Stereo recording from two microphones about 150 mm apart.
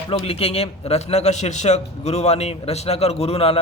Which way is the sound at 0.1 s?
40° left (ahead or behind).